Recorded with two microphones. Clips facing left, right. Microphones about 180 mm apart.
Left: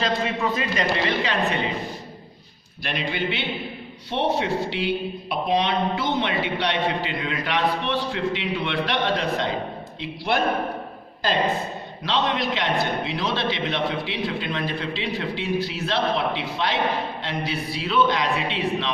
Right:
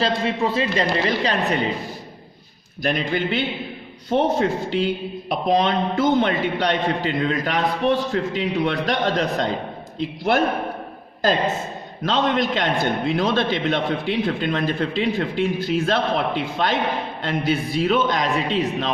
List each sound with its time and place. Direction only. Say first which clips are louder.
0.0 s speech: right 3 dB; 30° right (ahead or behind)
2.8 s a man's voice: right 5 dB; 45° right (ahead or behind)
12.0 s a man's voice: right 4 dB; 45° right (ahead or behind)